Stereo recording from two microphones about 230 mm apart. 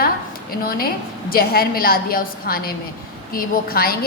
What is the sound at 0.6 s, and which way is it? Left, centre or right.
A woman's voice, left.